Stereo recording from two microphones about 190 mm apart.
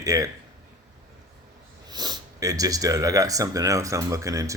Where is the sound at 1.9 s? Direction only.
20° right (ahead or behind).